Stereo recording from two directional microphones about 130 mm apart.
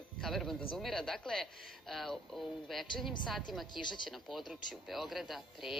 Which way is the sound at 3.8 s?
35° left (ahead or behind).